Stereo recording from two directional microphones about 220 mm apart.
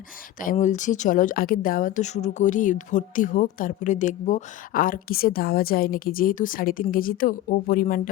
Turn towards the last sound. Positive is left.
turn(degrees=40)  # may be behind; listen again after turning